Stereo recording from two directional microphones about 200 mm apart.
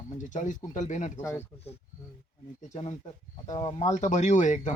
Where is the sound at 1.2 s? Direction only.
10° left (ahead or behind).